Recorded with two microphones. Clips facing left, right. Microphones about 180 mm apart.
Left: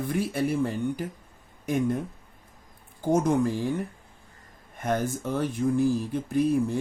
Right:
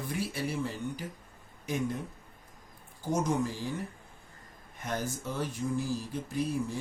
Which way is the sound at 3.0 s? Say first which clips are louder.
Left 7 dB; 55° left (ahead or behind).